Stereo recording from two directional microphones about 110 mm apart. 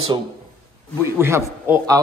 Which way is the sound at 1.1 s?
20° right (ahead or behind).